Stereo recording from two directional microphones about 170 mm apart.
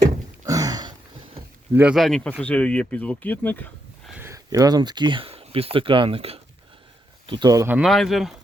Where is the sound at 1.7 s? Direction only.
5° right (ahead or behind).